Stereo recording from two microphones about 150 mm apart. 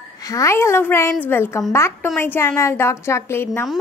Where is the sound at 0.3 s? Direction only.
20° left (ahead or behind).